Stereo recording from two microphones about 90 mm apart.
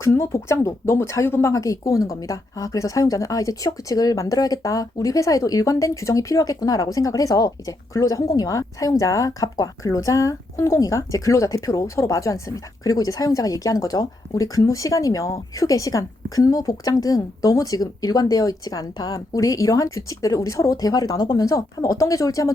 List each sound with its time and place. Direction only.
0.0 s speech: 30° left (ahead or behind)